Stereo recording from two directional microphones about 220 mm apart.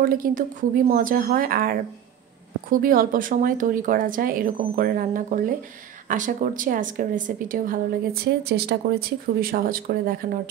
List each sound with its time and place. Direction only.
0.0 s speech: 40° right (ahead or behind)